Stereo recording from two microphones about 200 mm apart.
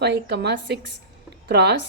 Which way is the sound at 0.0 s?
55° right (ahead or behind).